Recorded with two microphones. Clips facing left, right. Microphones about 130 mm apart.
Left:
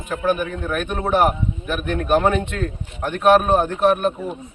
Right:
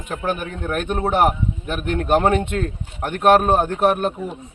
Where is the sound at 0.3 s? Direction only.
20° right (ahead or behind).